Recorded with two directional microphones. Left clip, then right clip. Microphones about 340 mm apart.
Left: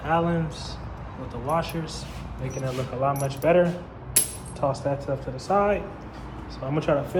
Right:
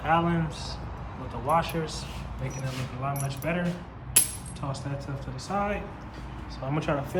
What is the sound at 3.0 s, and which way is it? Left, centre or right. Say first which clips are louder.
Speech: left 9 dB; centre.